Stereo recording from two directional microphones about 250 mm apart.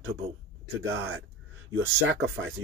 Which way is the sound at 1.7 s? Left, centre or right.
Right.